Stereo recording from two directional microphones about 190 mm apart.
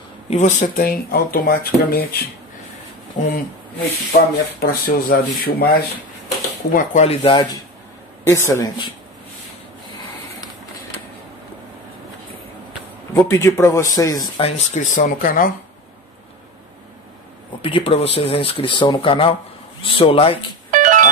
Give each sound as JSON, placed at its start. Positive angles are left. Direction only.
{"t": 0.3, "sound": "speech", "side_deg": 40}
{"t": 3.2, "sound": "speech", "side_deg": 40}
{"t": 6.7, "sound": "speech", "side_deg": 40}
{"t": 8.2, "sound": "speech", "side_deg": 15}
{"t": 13.3, "sound": "speech", "side_deg": 15}
{"t": 14.4, "sound": "speech", "side_deg": 40}
{"t": 17.6, "sound": "speech", "side_deg": 25}
{"t": 20.7, "sound": "music", "side_deg": -45}